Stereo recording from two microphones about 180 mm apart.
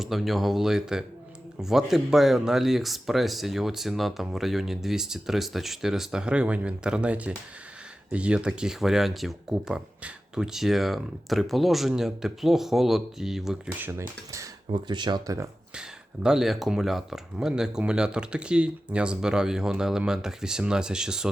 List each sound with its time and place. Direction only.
0.0 s speech: centre (ahead or behind)
14.7 s speech: 25° right (ahead or behind)
15.7 s speech: 5° right (ahead or behind)